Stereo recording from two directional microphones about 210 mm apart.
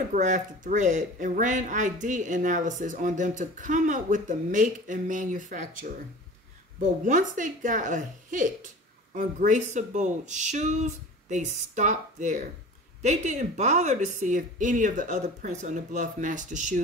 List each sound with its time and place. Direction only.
0.1 s speech: 35° right (ahead or behind)